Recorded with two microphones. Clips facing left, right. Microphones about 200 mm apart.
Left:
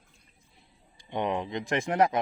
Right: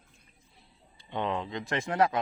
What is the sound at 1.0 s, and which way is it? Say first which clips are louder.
Speech: left 2 dB; 15° left (ahead or behind).